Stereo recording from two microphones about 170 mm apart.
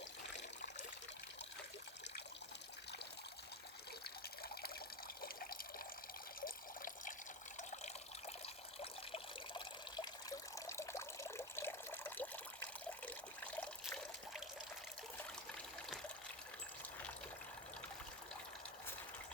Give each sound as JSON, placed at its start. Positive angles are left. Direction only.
{"t": 4.0, "sound": "water", "side_deg": 65}
{"t": 6.4, "sound": "water", "side_deg": 55}
{"t": 8.8, "sound": "water", "side_deg": 30}
{"t": 13.8, "sound": "trickle", "side_deg": 0}